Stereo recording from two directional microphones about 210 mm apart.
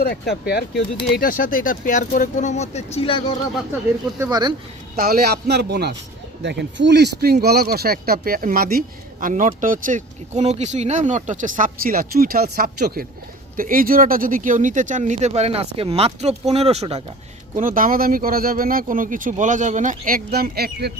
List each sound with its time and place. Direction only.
0.0 s speech: 50° left (ahead or behind); by 3.2 s 25° left (ahead or behind)
4.2 s speech: 20° right (ahead or behind)
4.9 s speech: 45° right (ahead or behind)